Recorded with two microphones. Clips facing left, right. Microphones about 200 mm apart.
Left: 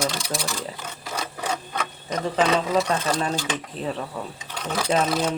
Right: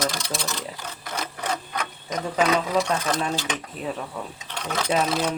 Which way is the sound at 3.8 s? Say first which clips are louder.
Left 2 dB; 35° left (ahead or behind).